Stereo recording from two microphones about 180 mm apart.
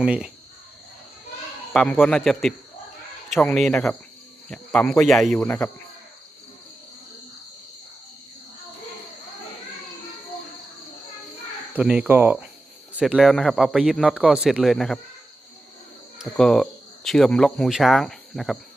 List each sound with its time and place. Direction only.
0.0 s speech: 5° right (ahead or behind)
1.7 s speech: 5° left (ahead or behind)
11.7 s speech: 10° right (ahead or behind)
16.1 s speech: centre (ahead or behind)